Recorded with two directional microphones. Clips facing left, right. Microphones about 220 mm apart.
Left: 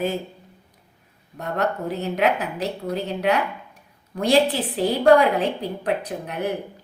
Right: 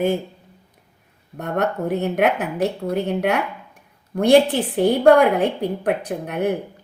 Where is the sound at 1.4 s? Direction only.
55° right (ahead or behind).